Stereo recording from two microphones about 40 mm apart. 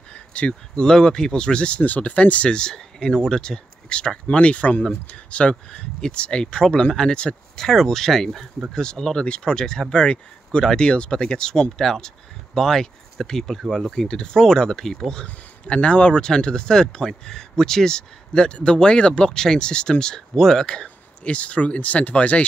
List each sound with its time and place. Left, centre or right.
0.1 s a sound: left
0.7 s speech: centre
1.8 s speech: left
2.5 s speech: centre
15.2 s speech: left
21.2 s speech: left